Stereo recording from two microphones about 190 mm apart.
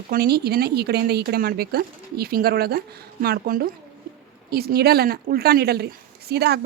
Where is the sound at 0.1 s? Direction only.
55° right (ahead or behind).